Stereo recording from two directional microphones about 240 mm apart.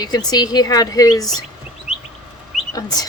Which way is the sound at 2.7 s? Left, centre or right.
Centre.